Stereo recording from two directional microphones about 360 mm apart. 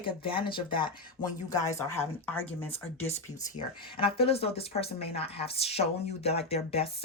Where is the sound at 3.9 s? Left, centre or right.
Centre.